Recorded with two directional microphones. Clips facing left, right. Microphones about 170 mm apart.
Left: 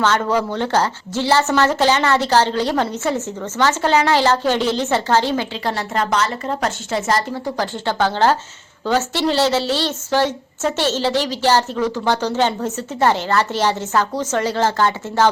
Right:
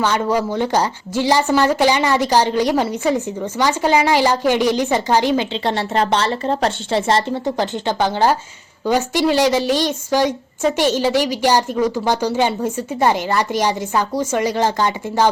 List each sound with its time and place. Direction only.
0.0 s a woman's voice: 10° right (ahead or behind)
5.6 s a woman's voice: 30° right (ahead or behind)